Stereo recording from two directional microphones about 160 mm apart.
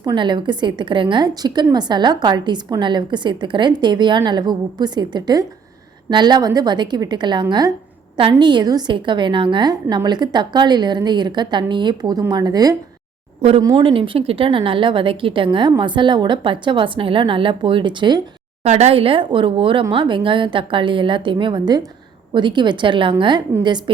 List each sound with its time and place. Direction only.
0.0 s a woman's voice: 30° right (ahead or behind)
18.6 s a woman's voice: 45° right (ahead or behind)